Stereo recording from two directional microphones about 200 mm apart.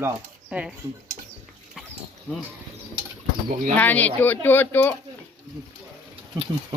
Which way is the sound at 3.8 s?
10° left (ahead or behind).